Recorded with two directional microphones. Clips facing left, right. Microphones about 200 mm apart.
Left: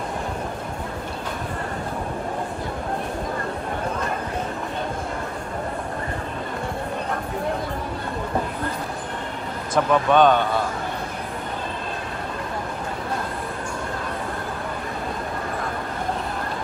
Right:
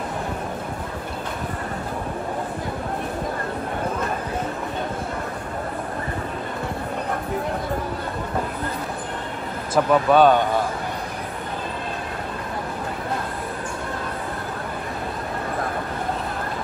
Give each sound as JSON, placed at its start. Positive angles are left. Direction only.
{"t": 9.8, "sound": "a man's voice", "side_deg": -5}